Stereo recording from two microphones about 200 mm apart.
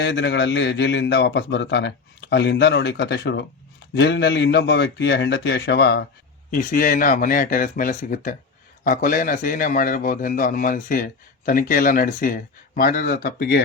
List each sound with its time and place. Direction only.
0.0 s a man's voice: 60° left (ahead or behind)
6.5 s a man's voice: 45° left (ahead or behind)